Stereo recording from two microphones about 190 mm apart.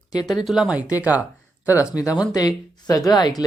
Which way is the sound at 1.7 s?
15° left (ahead or behind).